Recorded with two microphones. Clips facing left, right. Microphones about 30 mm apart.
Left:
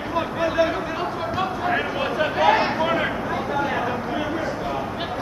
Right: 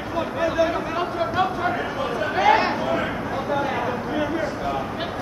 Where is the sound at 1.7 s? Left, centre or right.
Left.